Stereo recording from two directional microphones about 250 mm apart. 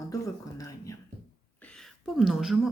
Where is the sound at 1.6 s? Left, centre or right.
Centre.